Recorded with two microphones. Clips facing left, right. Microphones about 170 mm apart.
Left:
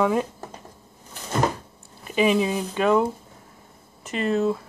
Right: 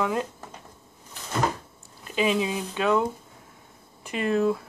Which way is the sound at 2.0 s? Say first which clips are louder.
Left 4 dB; 5° left (ahead or behind).